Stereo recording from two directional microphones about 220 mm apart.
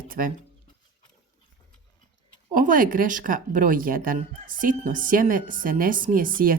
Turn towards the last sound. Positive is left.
turn(degrees=-40)  # may be behind; listen again after turning